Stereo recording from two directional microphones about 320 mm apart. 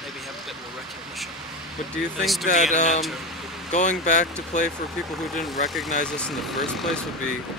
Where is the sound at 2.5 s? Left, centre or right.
Left.